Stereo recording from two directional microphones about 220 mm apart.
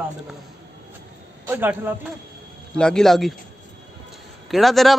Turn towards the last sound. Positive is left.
turn(degrees=0)  # may be behind; listen again after turning